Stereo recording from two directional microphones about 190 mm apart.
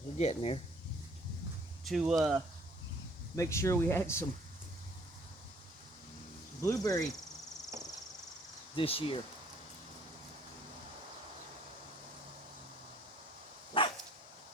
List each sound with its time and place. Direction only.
0.2 s speech: 35° left (ahead or behind)
1.8 s speech: centre (ahead or behind)
3.3 s speech: 15° left (ahead or behind)
6.7 s speech: 20° left (ahead or behind)
8.7 s speech: 30° left (ahead or behind)
13.7 s dog: 30° left (ahead or behind)